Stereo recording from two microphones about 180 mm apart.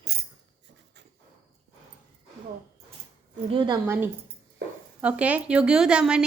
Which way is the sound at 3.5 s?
25° right (ahead or behind).